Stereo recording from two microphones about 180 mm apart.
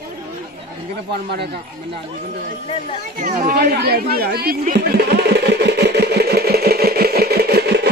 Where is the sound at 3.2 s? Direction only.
55° right (ahead or behind).